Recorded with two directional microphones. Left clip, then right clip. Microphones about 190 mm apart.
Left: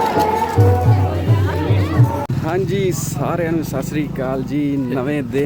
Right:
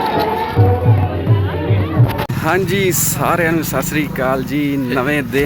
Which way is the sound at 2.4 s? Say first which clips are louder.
Right 5 dB; 10° right (ahead or behind).